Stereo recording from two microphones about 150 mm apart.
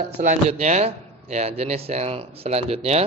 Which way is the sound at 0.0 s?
50° right (ahead or behind).